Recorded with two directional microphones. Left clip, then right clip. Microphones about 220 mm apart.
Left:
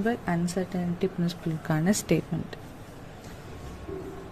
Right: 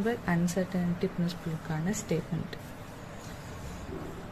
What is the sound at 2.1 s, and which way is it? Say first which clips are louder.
Speech: left 5 dB; 25° left (ahead or behind).